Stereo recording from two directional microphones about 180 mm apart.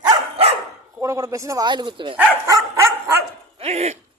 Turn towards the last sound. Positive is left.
turn(degrees=-35)  # may be behind; listen again after turning